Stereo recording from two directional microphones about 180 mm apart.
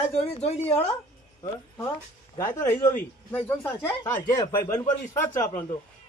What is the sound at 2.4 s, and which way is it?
Speech, 15° left (ahead or behind).